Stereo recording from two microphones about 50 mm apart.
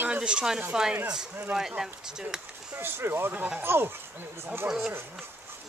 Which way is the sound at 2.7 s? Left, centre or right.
Right.